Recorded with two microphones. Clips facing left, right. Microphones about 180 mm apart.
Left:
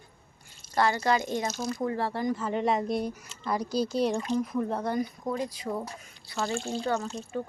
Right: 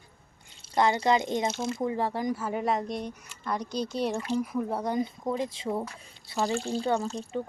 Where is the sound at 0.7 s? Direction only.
20° right (ahead or behind).